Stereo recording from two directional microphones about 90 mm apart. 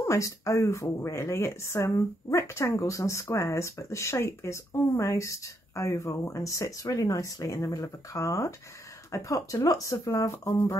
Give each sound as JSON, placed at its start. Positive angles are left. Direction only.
{"t": 0.0, "sound": "a woman's voice", "side_deg": 35}
{"t": 10.3, "sound": "speech", "side_deg": 25}